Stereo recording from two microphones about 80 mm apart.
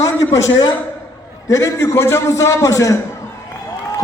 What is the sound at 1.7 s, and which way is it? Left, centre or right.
A man's voice, left.